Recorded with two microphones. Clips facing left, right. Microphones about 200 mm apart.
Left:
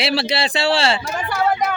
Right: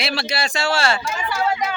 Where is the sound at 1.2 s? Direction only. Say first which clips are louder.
Left 4 dB; 55° left (ahead or behind).